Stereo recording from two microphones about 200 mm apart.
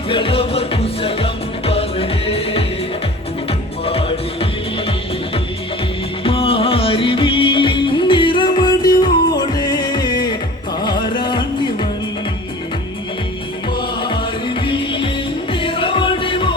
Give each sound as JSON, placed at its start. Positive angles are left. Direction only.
{"t": 0.1, "sound": "music", "side_deg": 25}
{"t": 3.8, "sound": "music", "side_deg": 30}
{"t": 6.2, "sound": "music", "side_deg": 30}
{"t": 14.0, "sound": "music", "side_deg": 25}